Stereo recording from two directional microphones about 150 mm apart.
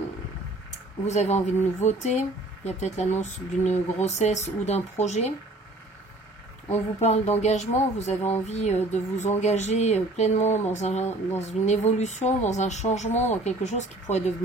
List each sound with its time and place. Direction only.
1.0 s speech: 50° left (ahead or behind)
6.7 s speech: 45° left (ahead or behind)